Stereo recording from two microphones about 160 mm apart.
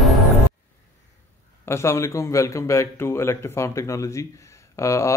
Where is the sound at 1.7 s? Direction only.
15° left (ahead or behind).